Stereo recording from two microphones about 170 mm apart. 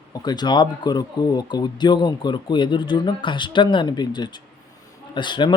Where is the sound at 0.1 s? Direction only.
25° left (ahead or behind).